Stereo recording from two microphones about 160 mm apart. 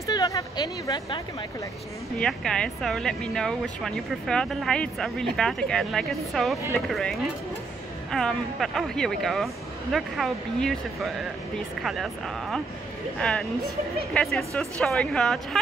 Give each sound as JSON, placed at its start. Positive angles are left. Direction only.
{"t": 0.0, "sound": "speech", "side_deg": 20}
{"t": 2.1, "sound": "speech", "side_deg": 5}